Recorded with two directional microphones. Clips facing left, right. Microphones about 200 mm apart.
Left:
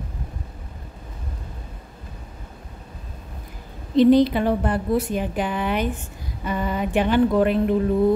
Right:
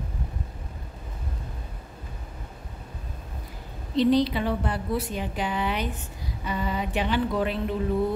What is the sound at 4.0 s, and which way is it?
A woman's voice, 50° left (ahead or behind).